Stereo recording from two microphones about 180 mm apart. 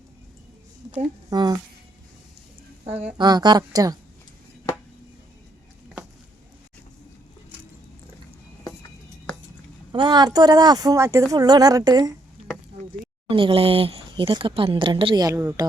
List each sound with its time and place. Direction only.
1.3 s speech: 20° right (ahead or behind)
3.2 s speech: 25° right (ahead or behind)
9.9 s speech: 25° right (ahead or behind)
13.2 s speech: 30° right (ahead or behind)